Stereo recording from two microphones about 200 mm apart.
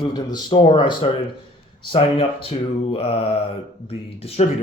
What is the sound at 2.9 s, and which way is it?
A man's voice, 30° left (ahead or behind).